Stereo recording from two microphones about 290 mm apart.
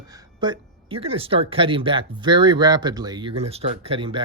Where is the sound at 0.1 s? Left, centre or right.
Centre.